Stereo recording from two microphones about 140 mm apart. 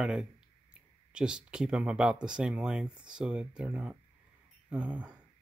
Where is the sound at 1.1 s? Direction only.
5° right (ahead or behind).